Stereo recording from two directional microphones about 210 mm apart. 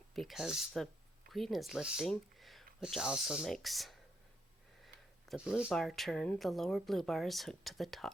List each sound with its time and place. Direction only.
0.1 s speech: centre (ahead or behind)
5.3 s speech: 5° right (ahead or behind)